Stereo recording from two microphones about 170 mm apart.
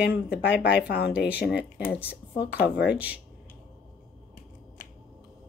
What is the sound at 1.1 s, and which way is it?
Speech, 5° right (ahead or behind).